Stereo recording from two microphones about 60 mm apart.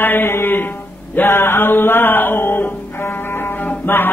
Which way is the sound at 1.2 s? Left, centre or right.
Left.